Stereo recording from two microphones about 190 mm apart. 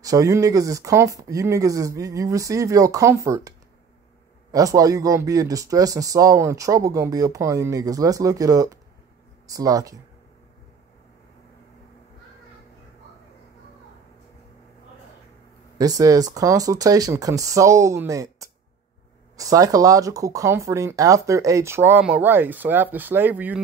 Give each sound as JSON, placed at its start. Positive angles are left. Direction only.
{"t": 0.0, "sound": "speech", "side_deg": -15}
{"t": 15.8, "sound": "speech", "side_deg": -20}